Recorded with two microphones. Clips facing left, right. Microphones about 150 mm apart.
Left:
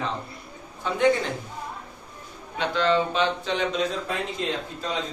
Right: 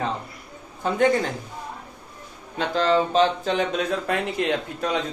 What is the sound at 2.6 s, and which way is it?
Speech, 40° right (ahead or behind).